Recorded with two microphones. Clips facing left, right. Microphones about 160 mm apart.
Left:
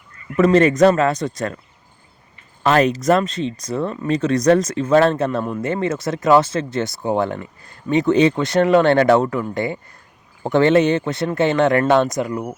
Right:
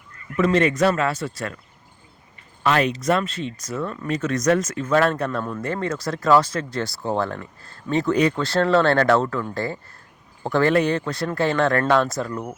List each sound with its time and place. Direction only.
0.3 s speech: 45° left (ahead or behind)
2.6 s speech: 40° left (ahead or behind); by 12.5 s 15° left (ahead or behind)